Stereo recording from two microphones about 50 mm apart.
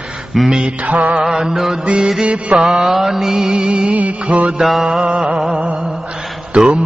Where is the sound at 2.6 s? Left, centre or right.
Centre.